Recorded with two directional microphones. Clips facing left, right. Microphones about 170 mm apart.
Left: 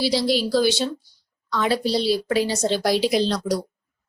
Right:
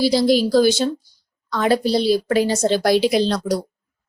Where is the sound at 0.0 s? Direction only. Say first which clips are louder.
Right 5 dB; 45° right (ahead or behind).